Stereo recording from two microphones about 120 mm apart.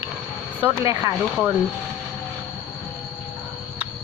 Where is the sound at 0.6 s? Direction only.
20° right (ahead or behind).